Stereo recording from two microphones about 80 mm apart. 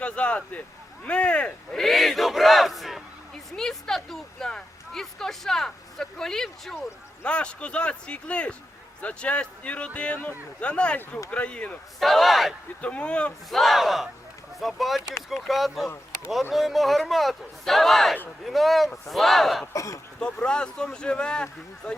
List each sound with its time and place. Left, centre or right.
0.0 s a sound: centre
1.0 s speech: centre
1.8 s battle cry: centre
7.3 s speech: centre
11.9 s speech: centre
12.8 s speech: centre
13.5 s speech: centre
19.7 s speech: left
20.1 s speech: centre